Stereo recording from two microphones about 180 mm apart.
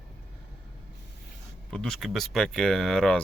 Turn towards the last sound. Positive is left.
turn(degrees=5)  # may be behind; listen again after turning